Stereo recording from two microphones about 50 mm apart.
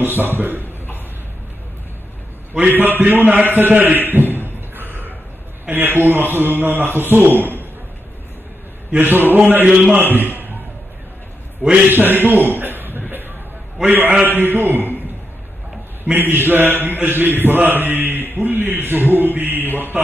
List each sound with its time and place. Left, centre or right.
0.0 s a man's voice: right
2.7 s a man's voice: right
4.1 s a sound: right
5.7 s a man's voice: right
8.9 s a man's voice: right
11.9 s chuckle: right
13.8 s a man's voice: right
16.1 s a man's voice: right